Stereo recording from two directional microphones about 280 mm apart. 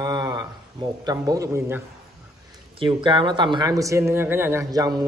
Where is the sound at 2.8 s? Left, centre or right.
Centre.